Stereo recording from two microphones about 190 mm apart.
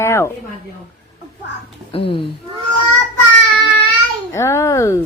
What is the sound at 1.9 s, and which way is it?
Speech, 25° left (ahead or behind).